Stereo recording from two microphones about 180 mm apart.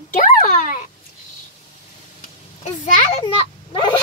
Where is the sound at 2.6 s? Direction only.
40° left (ahead or behind).